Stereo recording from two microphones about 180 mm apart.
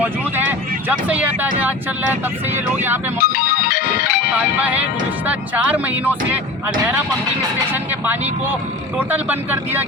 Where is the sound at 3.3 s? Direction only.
60° left (ahead or behind).